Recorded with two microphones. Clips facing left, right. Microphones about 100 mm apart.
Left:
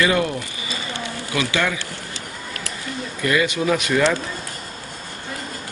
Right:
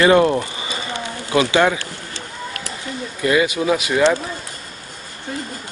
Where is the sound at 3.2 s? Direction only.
20° right (ahead or behind).